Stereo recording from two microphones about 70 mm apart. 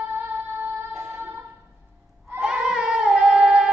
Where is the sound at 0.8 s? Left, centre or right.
Right.